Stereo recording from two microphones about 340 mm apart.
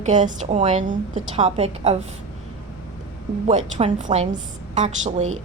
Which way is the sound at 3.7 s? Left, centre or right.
Centre.